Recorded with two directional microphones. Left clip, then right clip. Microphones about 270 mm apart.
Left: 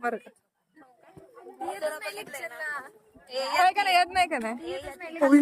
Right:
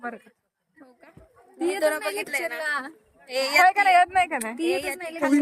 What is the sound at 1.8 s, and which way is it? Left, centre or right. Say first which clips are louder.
A woman's voice: right 10 dB; right.